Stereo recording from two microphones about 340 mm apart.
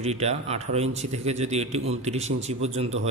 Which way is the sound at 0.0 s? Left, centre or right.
Centre.